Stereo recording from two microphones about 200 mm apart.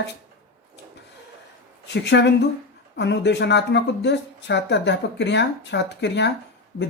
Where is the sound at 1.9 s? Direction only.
60° left (ahead or behind).